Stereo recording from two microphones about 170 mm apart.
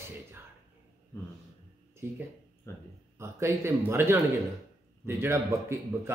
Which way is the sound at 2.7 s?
15° left (ahead or behind).